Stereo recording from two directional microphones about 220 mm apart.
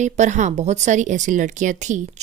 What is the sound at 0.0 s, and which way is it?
Speech, 35° right (ahead or behind).